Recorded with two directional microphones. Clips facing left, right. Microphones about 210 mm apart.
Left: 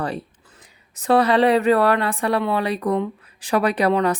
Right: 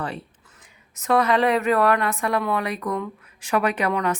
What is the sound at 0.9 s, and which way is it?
A woman's voice, 35° left (ahead or behind).